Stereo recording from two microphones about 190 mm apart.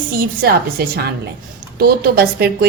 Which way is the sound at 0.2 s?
55° right (ahead or behind).